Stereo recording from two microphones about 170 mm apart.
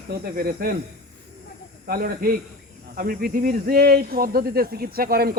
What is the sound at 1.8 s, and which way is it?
A man's voice, 60° right (ahead or behind).